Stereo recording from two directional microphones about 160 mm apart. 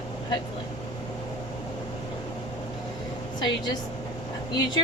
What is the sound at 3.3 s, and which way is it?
Speech, 25° left (ahead or behind).